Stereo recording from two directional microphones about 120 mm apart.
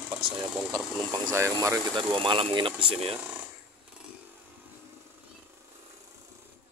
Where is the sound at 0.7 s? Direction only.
25° right (ahead or behind).